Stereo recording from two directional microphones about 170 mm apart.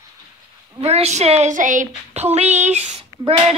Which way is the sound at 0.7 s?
35° right (ahead or behind).